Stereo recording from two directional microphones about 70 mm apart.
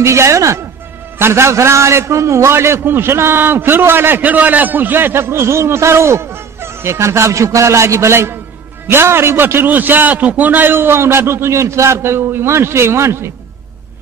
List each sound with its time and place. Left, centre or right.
0.0 s a woman's voice: right